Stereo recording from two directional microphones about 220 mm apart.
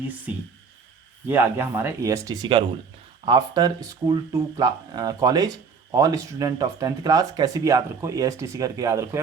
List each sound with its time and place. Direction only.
1.3 s speech: 10° right (ahead or behind)